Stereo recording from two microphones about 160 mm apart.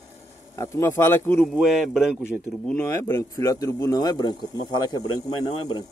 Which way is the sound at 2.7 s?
15° left (ahead or behind).